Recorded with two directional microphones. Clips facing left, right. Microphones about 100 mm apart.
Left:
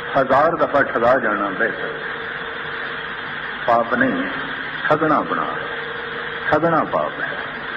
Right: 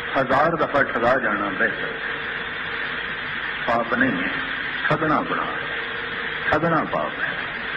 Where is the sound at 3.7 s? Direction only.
25° left (ahead or behind).